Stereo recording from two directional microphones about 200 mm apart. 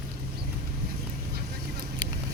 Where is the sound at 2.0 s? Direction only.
20° right (ahead or behind).